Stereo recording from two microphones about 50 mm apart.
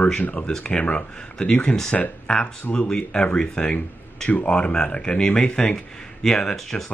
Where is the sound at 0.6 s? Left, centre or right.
Left.